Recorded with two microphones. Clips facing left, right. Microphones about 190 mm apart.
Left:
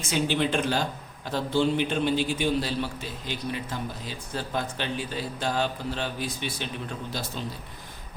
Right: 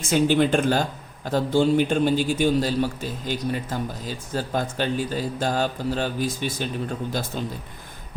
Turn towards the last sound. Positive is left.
turn(degrees=-50)  # may be behind; listen again after turning